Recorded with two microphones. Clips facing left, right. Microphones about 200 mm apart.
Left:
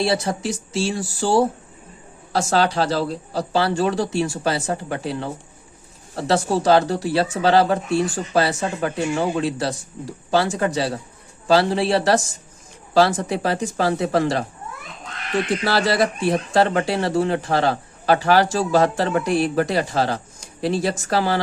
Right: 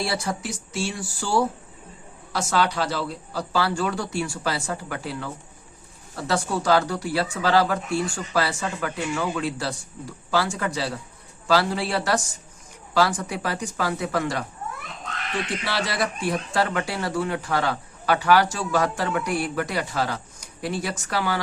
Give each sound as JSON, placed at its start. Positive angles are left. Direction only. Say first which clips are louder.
{"t": 0.0, "sound": "speech", "louder": "left 6 dB", "side_deg": 25}
{"t": 15.6, "sound": "speech", "louder": "left 8 dB", "side_deg": 30}